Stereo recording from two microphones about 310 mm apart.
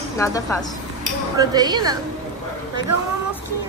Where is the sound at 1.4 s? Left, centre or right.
Centre.